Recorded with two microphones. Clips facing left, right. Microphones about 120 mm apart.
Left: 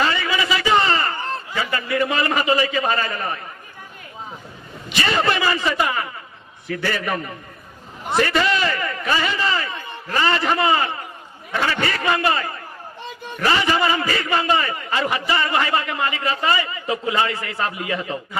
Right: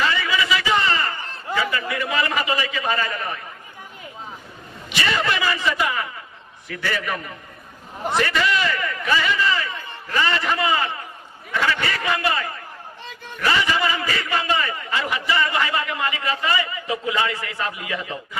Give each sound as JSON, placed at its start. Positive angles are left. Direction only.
{"t": 0.0, "sound": "a sound", "side_deg": 35}
{"t": 1.7, "sound": "a man's voice", "side_deg": 35}
{"t": 4.9, "sound": "a man's voice", "side_deg": 35}